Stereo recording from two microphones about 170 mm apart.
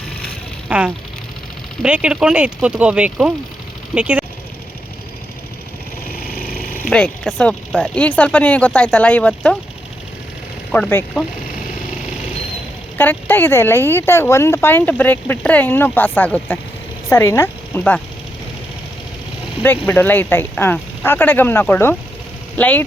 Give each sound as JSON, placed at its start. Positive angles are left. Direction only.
{"t": 0.7, "sound": "speech", "side_deg": -5}
{"t": 6.1, "sound": "a sound", "side_deg": 60}
{"t": 6.9, "sound": "speech", "side_deg": 5}
{"t": 10.7, "sound": "speech", "side_deg": 10}
{"t": 13.0, "sound": "speech", "side_deg": 10}
{"t": 19.9, "sound": "speech", "side_deg": 10}